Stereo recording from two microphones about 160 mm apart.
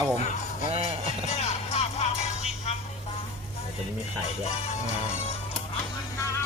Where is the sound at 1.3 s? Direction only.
45° left (ahead or behind).